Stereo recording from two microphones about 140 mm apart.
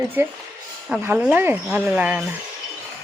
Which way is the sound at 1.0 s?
10° right (ahead or behind).